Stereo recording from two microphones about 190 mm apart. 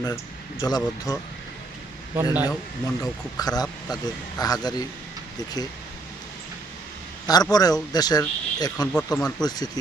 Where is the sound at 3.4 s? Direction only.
20° left (ahead or behind).